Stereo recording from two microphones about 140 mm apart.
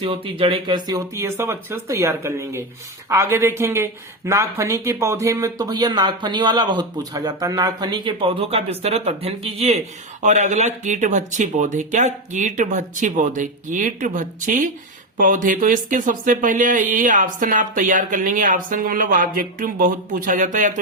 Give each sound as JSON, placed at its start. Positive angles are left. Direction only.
{"t": 0.0, "sound": "speech", "side_deg": -40}